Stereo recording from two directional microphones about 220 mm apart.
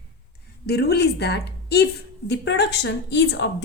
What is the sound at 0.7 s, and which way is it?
A woman's voice, 45° left (ahead or behind).